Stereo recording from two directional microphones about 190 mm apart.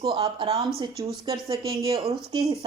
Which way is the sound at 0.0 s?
25° right (ahead or behind).